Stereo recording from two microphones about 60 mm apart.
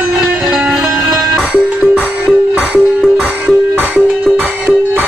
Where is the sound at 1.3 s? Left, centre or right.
Right.